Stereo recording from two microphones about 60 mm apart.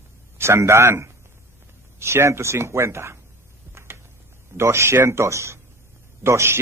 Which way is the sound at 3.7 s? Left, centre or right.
Right.